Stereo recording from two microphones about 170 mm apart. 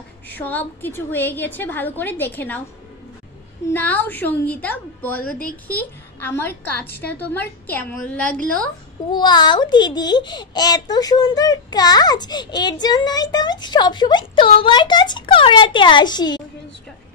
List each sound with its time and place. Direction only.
0.3 s a woman's voice: 10° left (ahead or behind)
3.7 s a woman's voice: 10° left (ahead or behind)
9.1 s a child's voice: 25° left (ahead or behind)